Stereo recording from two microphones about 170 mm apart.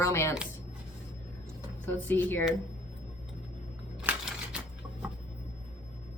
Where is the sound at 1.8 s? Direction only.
10° left (ahead or behind).